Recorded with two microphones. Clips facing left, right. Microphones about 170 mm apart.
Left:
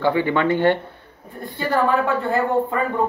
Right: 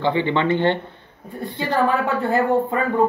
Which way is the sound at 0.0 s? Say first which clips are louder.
Left 1 dB; 20° right (ahead or behind).